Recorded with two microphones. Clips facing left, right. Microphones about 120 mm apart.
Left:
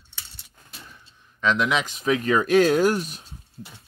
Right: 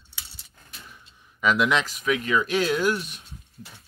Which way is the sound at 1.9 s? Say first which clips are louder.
Left 3 dB; 35° left (ahead or behind).